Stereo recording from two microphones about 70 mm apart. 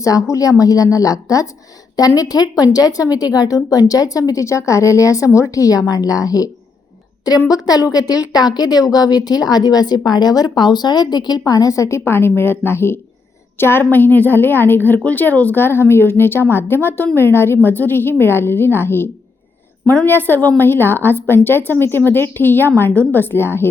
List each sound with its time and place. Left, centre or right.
0.0 s a woman's voice: left